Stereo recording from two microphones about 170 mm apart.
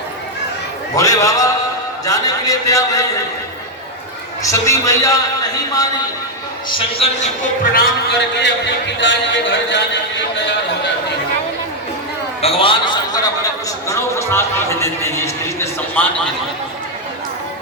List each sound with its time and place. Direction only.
0.9 s a man's voice: 20° left (ahead or behind)
4.4 s a man's voice: 20° left (ahead or behind)
6.7 s a man's voice: 35° left (ahead or behind); by 7.9 s 55° left (ahead or behind)
8.4 s speech: 90° left
12.4 s a sound: 35° left (ahead or behind); by 16.3 s 10° left (ahead or behind)